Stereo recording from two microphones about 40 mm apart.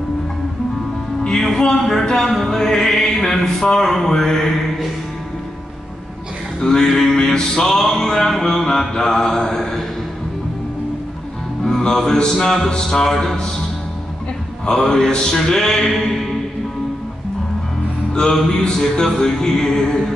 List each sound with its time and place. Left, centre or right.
1.3 s music: centre
6.6 s music: centre
11.6 s music: centre
14.7 s music: centre
15.9 s mantra: centre
18.1 s music: centre